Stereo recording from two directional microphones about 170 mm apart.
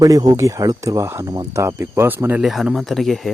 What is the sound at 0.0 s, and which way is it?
Speech, 20° right (ahead or behind).